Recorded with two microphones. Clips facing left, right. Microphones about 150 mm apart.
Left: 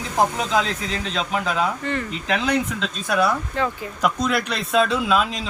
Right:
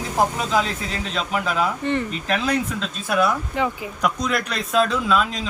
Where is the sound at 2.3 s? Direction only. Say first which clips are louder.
Left 2 dB; 5° right (ahead or behind).